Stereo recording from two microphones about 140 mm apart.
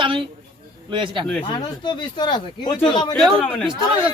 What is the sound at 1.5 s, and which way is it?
Speech, 30° left (ahead or behind).